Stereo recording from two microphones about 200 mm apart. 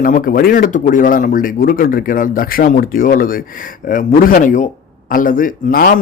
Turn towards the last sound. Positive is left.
turn(degrees=45)  # may be behind; listen again after turning